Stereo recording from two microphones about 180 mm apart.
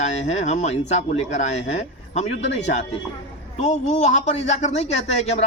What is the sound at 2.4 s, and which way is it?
Speech, 90° left.